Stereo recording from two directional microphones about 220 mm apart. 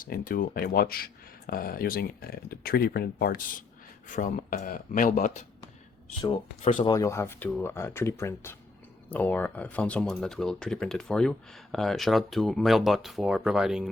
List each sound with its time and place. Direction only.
0.0 s speech: 40° left (ahead or behind)
6.6 s speech: 30° left (ahead or behind)
6.9 s speech: 15° left (ahead or behind); by 13.9 s centre (ahead or behind)